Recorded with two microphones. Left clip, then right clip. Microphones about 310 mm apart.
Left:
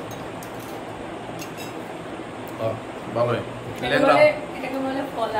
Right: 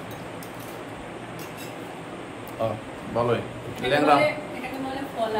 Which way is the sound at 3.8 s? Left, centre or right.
Centre.